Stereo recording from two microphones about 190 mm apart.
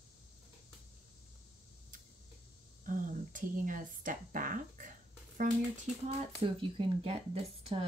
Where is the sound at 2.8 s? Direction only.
45° right (ahead or behind).